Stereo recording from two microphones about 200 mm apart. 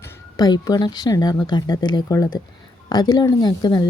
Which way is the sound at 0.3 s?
20° left (ahead or behind).